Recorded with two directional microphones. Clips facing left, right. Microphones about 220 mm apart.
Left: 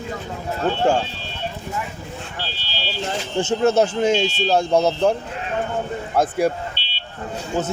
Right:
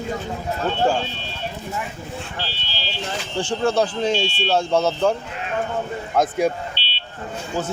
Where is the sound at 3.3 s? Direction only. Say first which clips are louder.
Left 3 dB; 20° left (ahead or behind).